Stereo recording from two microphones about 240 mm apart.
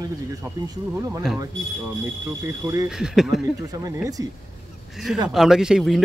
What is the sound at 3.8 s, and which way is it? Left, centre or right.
Speech, centre.